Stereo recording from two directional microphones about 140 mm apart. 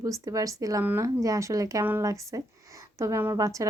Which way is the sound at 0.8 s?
15° right (ahead or behind).